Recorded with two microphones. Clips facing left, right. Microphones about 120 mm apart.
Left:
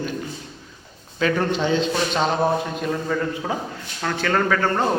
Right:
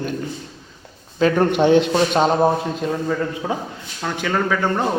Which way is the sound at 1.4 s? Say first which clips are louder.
Right 6 dB; 60° right (ahead or behind).